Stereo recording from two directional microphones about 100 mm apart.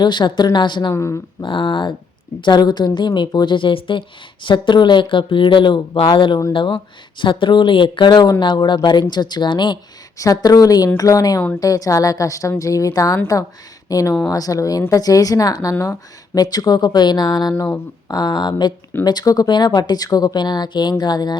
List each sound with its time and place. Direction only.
0.0 s speech: 50° left (ahead or behind)
0.9 s speech: 30° left (ahead or behind)
1.4 s speech: 55° left (ahead or behind)
10.2 s a woman's voice: 35° left (ahead or behind)